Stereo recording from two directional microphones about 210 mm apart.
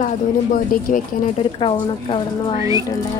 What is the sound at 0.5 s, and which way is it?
Speech, 40° left (ahead or behind).